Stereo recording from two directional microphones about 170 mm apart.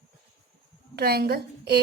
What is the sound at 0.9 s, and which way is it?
Speech, 70° right (ahead or behind).